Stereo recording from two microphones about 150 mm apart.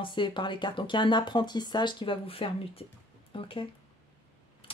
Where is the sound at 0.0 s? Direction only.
30° left (ahead or behind).